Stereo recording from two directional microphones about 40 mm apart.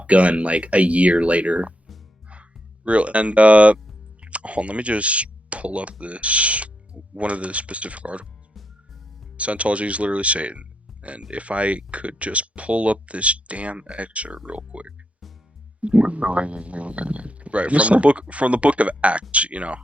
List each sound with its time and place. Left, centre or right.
0.0 s speech: right
9.4 s speech: right